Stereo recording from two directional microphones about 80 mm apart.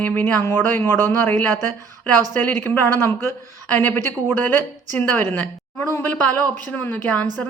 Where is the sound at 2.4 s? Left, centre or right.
Left.